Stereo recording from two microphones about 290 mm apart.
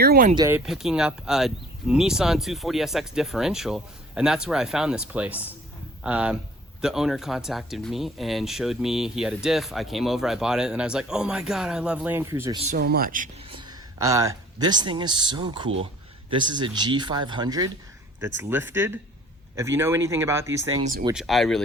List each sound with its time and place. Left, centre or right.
0.0 s speech: right
0.3 s speech: centre
12.7 s speech: right
13.6 s speech: centre